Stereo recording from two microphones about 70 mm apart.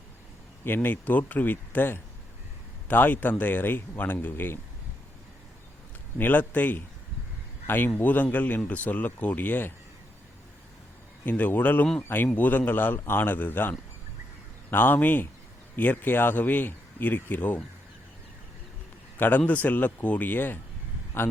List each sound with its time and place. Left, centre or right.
0.6 s speech: left
6.1 s speech: left
7.9 s speech: left
11.3 s speech: left
19.1 s a man's voice: left